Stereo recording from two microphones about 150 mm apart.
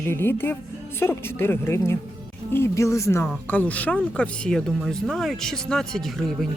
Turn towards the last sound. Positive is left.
turn(degrees=0)  # may be behind; listen again after turning